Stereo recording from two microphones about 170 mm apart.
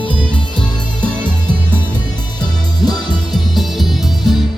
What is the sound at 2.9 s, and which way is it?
Music, 25° left (ahead or behind).